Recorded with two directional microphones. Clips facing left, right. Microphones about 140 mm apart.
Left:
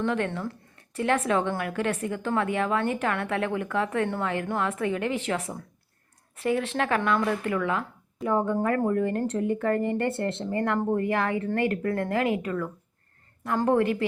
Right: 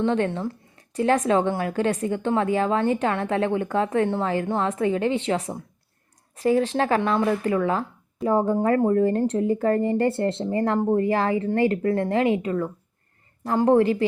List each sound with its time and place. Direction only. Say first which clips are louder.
0.0 s a woman's voice: right 4 dB; 30° right (ahead or behind)